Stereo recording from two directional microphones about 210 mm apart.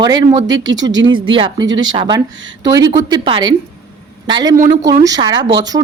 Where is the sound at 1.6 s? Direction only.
65° right (ahead or behind).